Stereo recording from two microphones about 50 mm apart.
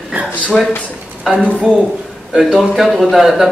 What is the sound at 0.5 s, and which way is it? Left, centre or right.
Speech, left.